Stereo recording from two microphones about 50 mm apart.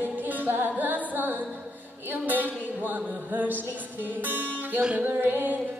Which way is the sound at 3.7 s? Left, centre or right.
Right.